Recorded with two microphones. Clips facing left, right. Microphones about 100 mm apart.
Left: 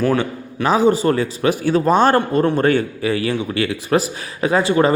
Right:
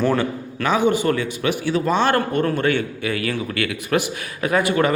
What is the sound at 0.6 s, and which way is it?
Speech, 35° left (ahead or behind).